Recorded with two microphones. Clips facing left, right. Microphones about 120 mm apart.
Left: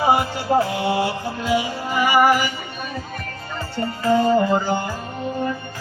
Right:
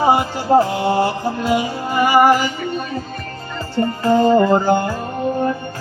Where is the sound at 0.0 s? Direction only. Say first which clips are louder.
Right 3 dB; 35° right (ahead or behind).